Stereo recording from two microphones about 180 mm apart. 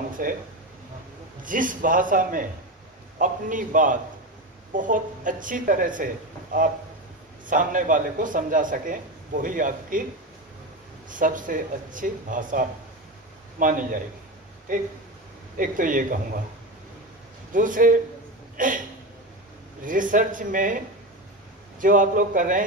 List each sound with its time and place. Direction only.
0.2 s a man's voice: 50° right (ahead or behind)
1.4 s a man's voice: 50° right (ahead or behind)
7.4 s a man's voice: 45° right (ahead or behind)
11.1 s a man's voice: 45° right (ahead or behind)
17.5 s a man's voice: 45° right (ahead or behind)
19.8 s a man's voice: 50° right (ahead or behind)